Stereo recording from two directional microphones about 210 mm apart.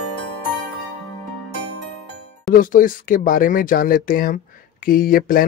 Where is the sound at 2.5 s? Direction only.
40° left (ahead or behind).